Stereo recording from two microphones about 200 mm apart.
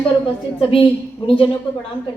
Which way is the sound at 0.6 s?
25° left (ahead or behind).